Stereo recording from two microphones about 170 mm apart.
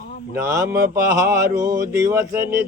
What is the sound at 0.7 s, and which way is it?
Mantra, 65° right (ahead or behind).